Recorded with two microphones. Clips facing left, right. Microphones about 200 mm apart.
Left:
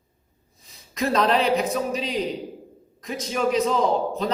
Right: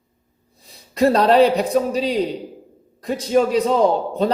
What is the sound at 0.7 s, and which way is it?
A man's voice, 35° right (ahead or behind).